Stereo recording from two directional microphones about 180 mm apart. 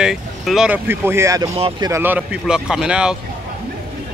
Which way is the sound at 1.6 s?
30° right (ahead or behind).